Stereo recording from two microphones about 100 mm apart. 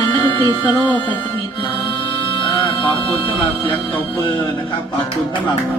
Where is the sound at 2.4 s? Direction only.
55° left (ahead or behind).